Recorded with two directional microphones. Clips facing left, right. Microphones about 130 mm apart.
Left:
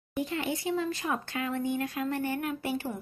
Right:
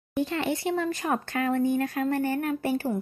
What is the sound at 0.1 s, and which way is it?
Speech, 80° right.